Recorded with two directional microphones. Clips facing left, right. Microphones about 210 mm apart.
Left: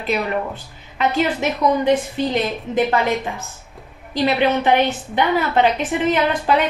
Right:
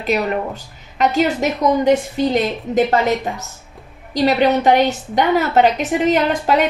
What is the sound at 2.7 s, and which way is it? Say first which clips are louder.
A woman's voice: right 3 dB; 45° right (ahead or behind).